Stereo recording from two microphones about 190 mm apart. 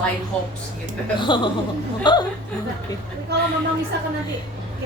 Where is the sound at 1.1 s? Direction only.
25° left (ahead or behind).